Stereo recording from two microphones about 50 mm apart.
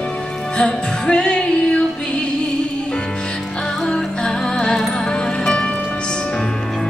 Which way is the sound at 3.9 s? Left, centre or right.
Centre.